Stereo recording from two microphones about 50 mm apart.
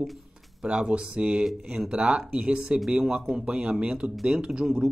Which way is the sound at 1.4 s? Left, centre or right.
Centre.